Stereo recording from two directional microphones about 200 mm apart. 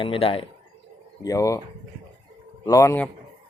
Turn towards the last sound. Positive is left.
turn(degrees=15)  # may be behind; listen again after turning